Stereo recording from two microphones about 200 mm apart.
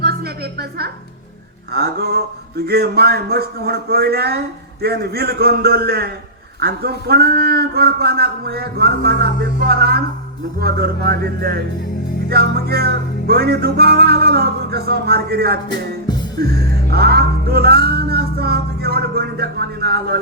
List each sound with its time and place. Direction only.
1.7 s a man's voice: 50° right (ahead or behind)